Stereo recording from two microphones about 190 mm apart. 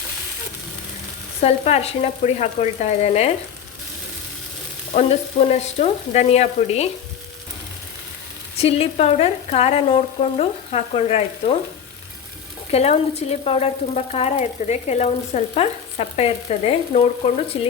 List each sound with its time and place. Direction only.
1.4 s speech: 35° left (ahead or behind)
4.9 s speech: 30° left (ahead or behind)
8.5 s speech: 30° left (ahead or behind)
12.7 s speech: 35° left (ahead or behind)